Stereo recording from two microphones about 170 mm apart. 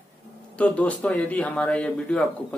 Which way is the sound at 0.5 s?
5° left (ahead or behind).